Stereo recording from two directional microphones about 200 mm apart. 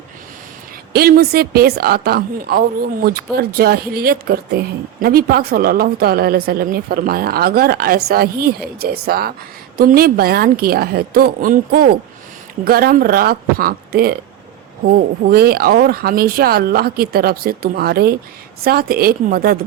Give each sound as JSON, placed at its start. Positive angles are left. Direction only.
{"t": 0.9, "sound": "a woman's voice", "side_deg": -50}
{"t": 15.2, "sound": "a woman's voice", "side_deg": -50}